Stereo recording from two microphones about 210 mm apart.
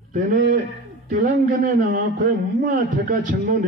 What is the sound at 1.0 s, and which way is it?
A man's voice, 40° right (ahead or behind).